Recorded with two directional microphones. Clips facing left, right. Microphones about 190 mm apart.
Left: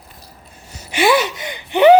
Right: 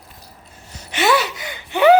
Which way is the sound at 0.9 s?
10° left (ahead or behind).